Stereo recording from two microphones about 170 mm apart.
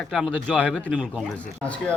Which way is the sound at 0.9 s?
5° right (ahead or behind).